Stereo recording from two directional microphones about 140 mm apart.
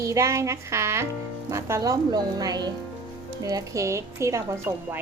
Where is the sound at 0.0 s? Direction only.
20° right (ahead or behind).